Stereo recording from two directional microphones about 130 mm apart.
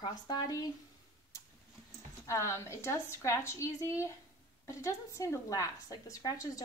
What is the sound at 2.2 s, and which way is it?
A woman's voice, 25° left (ahead or behind).